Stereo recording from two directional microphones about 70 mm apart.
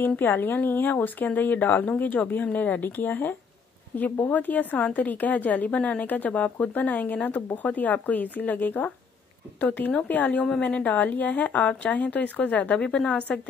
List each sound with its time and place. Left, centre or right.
0.0 s speech: left